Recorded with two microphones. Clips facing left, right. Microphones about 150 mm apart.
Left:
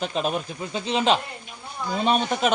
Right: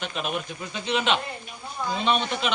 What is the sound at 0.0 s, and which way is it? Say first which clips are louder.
A man's voice: left 4 dB; 35° left (ahead or behind).